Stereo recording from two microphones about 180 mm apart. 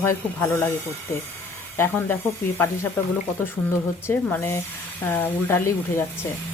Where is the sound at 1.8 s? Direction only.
10° left (ahead or behind).